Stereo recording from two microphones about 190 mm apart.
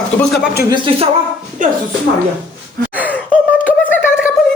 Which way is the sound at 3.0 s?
10° left (ahead or behind).